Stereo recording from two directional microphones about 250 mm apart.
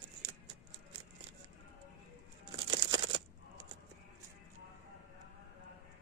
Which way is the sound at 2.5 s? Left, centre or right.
Centre.